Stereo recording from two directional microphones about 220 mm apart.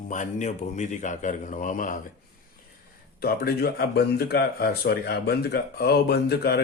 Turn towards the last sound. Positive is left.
turn(degrees=45)  # may be behind; listen again after turning